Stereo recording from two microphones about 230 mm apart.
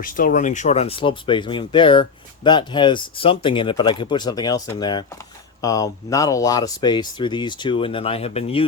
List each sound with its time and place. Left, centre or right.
0.0 s speech: left